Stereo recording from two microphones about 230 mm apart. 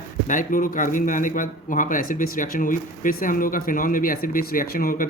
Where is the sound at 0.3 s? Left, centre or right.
Left.